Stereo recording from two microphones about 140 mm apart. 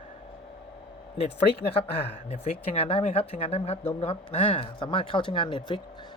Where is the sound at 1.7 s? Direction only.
45° left (ahead or behind).